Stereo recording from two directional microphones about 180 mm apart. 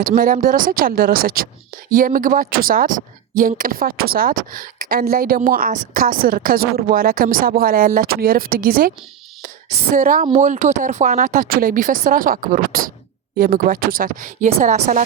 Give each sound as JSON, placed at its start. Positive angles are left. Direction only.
{"t": 0.0, "sound": "speech", "side_deg": -50}
{"t": 9.9, "sound": "speech", "side_deg": -50}